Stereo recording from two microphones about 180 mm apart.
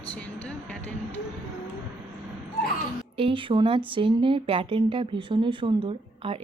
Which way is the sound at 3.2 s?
30° right (ahead or behind).